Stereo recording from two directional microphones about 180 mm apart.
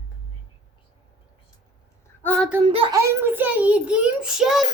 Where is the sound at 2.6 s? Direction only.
30° right (ahead or behind).